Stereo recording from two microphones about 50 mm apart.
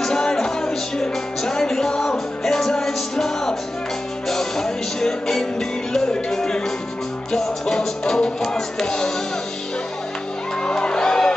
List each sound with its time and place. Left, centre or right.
0.0 s music: centre
10.6 s music: centre